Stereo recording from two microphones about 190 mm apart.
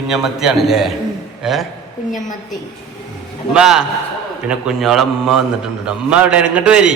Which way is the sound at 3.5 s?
5° right (ahead or behind).